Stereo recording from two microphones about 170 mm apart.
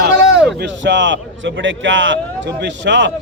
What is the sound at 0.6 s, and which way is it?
A man's voice, 90° right.